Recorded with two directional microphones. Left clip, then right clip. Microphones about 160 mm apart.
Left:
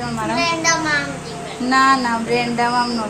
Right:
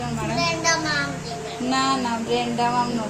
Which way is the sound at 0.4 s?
45° right (ahead or behind).